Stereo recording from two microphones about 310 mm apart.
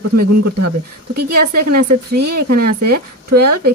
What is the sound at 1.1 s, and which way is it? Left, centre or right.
A woman's voice, right.